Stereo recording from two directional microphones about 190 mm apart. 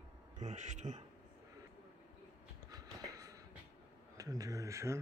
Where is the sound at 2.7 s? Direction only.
20° right (ahead or behind).